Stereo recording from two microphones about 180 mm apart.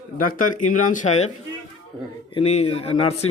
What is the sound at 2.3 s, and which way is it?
Speech, 35° left (ahead or behind).